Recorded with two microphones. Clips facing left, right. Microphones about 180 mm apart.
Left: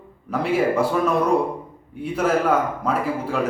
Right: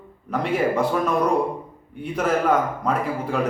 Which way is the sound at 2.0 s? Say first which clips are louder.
Left 1 dB; 5° left (ahead or behind).